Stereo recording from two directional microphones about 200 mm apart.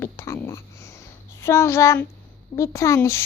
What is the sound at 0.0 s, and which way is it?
Whispering, 10° left (ahead or behind).